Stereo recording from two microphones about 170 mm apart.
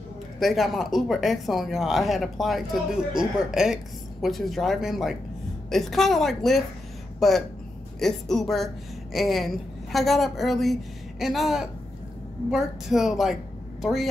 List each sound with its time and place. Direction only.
0.4 s speech: centre (ahead or behind)